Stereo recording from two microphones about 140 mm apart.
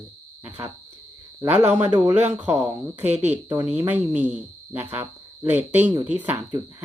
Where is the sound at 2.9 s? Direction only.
50° right (ahead or behind).